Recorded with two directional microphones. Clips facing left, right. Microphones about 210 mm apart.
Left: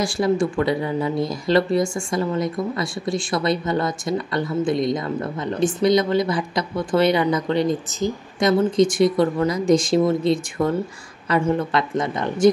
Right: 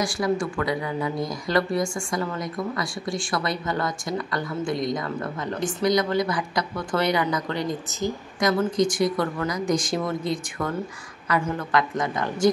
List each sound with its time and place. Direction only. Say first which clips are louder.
0.0 s speech: left 4 dB; 25° left (ahead or behind)